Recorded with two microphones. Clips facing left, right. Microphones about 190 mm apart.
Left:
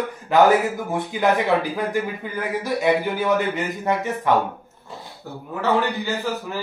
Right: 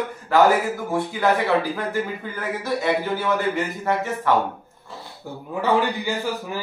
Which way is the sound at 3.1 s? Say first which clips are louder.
Left 1 dB; 15° left (ahead or behind).